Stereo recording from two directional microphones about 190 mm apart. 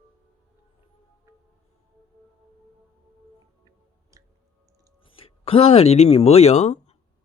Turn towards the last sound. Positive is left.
turn(degrees=35)  # may be behind; listen again after turning